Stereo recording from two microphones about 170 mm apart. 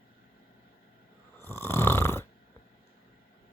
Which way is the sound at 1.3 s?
15° left (ahead or behind).